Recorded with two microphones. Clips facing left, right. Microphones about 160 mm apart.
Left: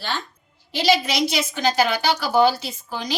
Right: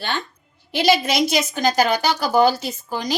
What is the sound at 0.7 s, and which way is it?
A woman's voice, 50° right (ahead or behind).